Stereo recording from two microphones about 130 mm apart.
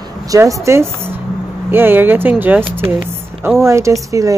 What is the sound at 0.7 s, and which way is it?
Speech, 20° right (ahead or behind).